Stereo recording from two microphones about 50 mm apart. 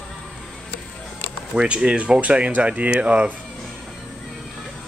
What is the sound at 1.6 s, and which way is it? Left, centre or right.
Speech, centre.